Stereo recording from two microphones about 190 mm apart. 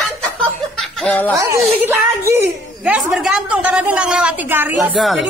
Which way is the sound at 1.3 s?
15° right (ahead or behind).